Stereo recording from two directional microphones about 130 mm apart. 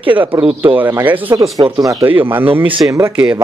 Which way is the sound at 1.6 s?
25° right (ahead or behind).